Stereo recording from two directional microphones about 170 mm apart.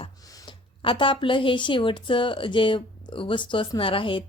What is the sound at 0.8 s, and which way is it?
A woman's voice, 30° left (ahead or behind).